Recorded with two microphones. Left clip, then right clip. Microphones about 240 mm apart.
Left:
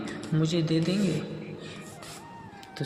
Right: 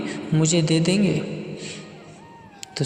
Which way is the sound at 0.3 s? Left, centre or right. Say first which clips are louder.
Right 6 dB; right.